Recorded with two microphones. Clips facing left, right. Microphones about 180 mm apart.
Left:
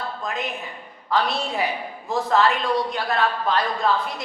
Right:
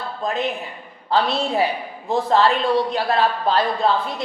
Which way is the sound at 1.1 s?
30° right (ahead or behind).